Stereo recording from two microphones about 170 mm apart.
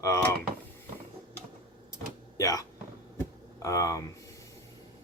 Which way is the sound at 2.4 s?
20° left (ahead or behind).